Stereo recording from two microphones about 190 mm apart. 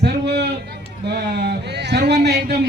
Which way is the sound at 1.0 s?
60° right (ahead or behind).